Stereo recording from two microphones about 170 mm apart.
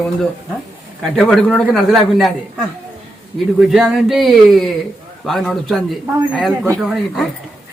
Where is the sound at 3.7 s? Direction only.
Centre (ahead or behind).